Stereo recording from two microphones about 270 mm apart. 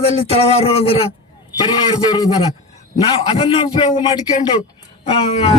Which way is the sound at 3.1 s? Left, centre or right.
Centre.